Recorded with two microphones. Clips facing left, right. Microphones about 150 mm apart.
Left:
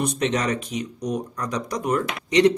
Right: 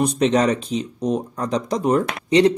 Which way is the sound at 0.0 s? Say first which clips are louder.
Right 6 dB; 30° right (ahead or behind).